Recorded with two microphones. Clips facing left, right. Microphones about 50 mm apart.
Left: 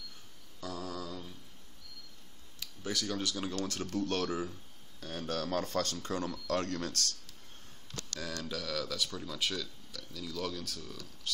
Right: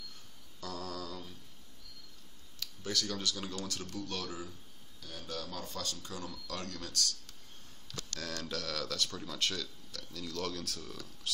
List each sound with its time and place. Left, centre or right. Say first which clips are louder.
0.6 s a sound: left 1 dB; centre
2.6 s speech: even; left
3.5 s speech: left 6 dB; left
5.0 s speech: left 6 dB; left
8.2 s speech: left 1 dB; centre